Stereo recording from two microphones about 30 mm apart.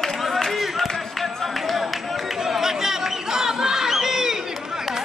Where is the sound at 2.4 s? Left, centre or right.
Centre.